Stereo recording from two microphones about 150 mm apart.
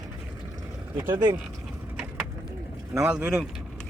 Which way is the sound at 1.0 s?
25° right (ahead or behind).